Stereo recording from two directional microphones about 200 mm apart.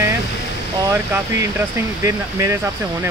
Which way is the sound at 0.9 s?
15° right (ahead or behind).